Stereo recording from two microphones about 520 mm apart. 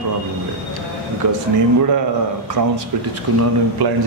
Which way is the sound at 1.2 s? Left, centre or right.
Right.